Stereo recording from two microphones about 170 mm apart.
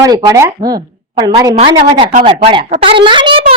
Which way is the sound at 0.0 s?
20° right (ahead or behind).